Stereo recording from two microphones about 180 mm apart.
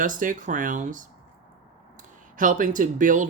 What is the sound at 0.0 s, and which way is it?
Speech, 50° right (ahead or behind).